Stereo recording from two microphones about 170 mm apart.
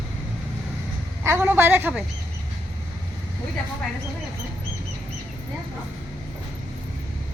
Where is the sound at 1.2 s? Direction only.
15° right (ahead or behind).